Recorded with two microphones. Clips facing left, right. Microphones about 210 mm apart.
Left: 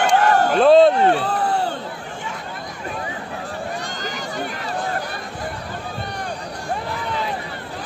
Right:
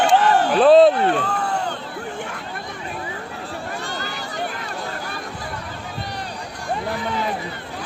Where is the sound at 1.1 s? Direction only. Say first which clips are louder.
Left 2 dB; 35° left (ahead or behind).